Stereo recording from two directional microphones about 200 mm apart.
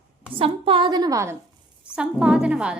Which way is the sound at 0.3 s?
25° right (ahead or behind).